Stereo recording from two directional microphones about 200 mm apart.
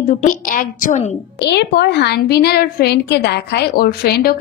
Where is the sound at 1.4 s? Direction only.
55° left (ahead or behind).